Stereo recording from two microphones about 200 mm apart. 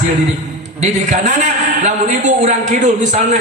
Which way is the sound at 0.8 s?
35° right (ahead or behind).